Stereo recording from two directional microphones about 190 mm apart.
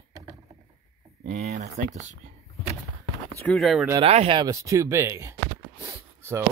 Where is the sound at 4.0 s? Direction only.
30° right (ahead or behind); by 5.4 s 15° right (ahead or behind).